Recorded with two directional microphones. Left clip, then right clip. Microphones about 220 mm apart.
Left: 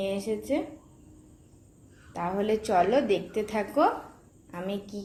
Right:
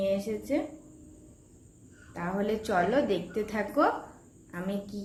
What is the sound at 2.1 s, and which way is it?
A woman's voice, 5° left (ahead or behind).